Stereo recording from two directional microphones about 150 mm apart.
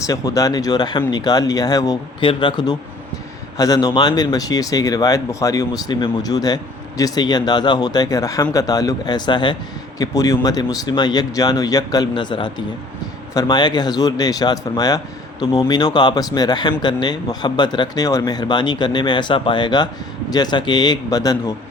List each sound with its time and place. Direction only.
0.1 s a man's voice: 25° left (ahead or behind)